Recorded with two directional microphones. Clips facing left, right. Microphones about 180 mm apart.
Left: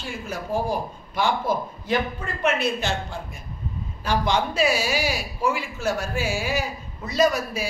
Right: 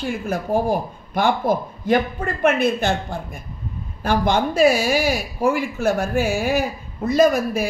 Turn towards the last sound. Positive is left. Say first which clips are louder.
# right 5 dB
turn(degrees=-50)  # may be behind; listen again after turning